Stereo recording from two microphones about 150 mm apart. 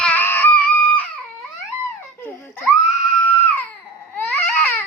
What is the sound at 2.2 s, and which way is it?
Laughter, 10° left (ahead or behind).